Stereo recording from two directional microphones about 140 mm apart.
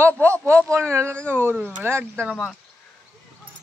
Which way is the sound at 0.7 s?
20° right (ahead or behind).